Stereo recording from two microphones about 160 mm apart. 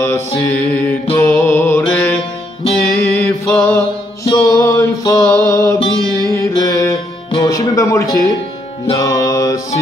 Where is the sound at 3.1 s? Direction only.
10° left (ahead or behind).